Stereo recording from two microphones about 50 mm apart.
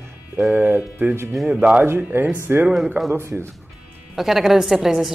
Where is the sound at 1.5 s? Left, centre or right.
Right.